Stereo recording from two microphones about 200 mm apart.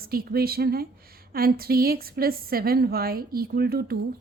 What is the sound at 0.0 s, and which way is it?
A woman's voice, 50° right (ahead or behind).